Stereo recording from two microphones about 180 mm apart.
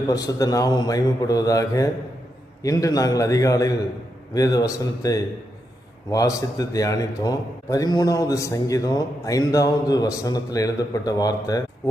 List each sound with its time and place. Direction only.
0.1 s a man's voice: 20° left (ahead or behind)